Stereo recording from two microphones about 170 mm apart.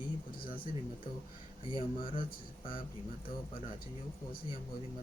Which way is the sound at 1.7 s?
30° left (ahead or behind).